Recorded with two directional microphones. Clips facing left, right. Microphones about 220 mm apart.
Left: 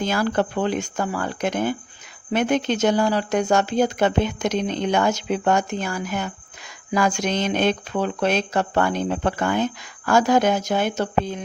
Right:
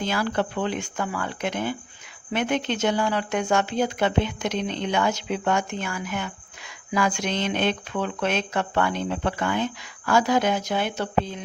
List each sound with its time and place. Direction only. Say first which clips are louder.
0.0 s speech: left 4 dB; 45° left (ahead or behind)